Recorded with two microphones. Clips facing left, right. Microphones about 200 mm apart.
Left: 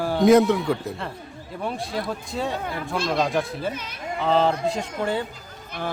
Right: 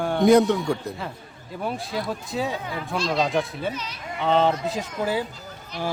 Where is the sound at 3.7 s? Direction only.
55° left (ahead or behind).